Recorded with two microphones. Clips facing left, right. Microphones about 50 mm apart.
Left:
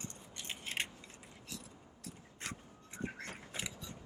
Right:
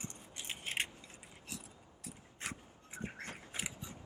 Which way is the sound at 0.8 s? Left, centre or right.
Centre.